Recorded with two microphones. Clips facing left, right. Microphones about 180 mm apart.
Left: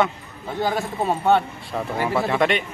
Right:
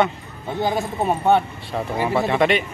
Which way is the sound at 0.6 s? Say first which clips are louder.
Right 1 dB; 15° right (ahead or behind).